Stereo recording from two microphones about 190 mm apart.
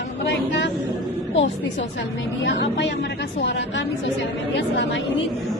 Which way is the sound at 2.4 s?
70° left (ahead or behind).